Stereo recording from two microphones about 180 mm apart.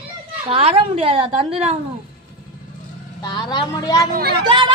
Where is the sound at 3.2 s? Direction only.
25° left (ahead or behind).